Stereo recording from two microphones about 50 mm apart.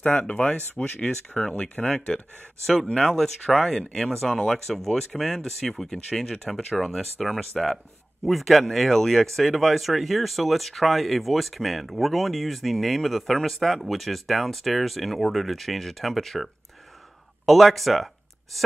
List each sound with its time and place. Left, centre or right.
0.0 s speech: left
2.6 s speech: centre
17.5 s speech: centre